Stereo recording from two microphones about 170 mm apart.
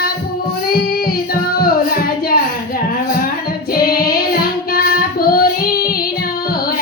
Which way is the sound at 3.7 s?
60° left (ahead or behind).